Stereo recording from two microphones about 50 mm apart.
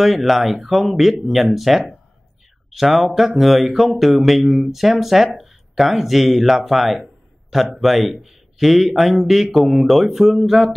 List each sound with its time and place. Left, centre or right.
0.0 s speech: centre